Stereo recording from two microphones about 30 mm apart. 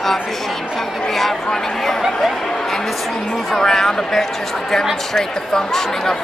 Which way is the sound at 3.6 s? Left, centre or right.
Centre.